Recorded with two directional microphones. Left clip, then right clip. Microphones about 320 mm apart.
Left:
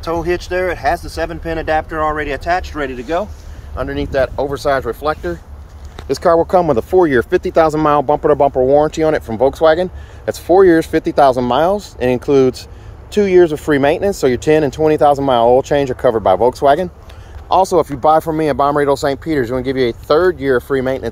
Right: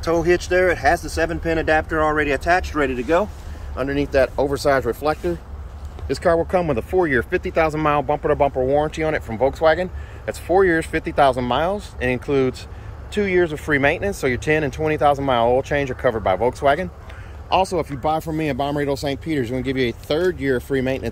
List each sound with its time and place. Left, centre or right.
0.0 s speech: centre
1.2 s speech: centre
4.1 s speech: centre
6.0 s speech: centre
18.0 s speech: centre